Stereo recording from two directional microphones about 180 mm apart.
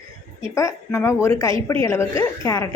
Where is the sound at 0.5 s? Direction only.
15° left (ahead or behind).